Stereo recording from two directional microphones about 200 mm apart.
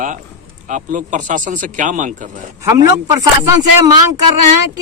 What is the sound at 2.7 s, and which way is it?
A man's voice, 15° right (ahead or behind).